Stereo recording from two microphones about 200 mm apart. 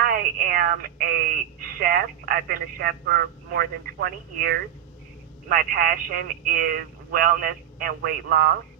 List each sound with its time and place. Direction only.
0.0 s a woman's voice: 50° right (ahead or behind)